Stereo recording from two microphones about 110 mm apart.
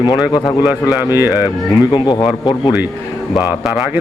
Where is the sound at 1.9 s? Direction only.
45° left (ahead or behind).